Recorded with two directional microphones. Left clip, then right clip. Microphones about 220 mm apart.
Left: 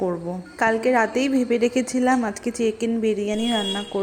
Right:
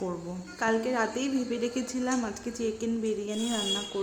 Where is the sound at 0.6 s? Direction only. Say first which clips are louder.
Left 8 dB; 25° left (ahead or behind).